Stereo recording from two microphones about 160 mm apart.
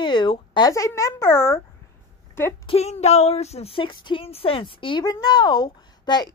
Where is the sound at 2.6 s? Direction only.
40° left (ahead or behind).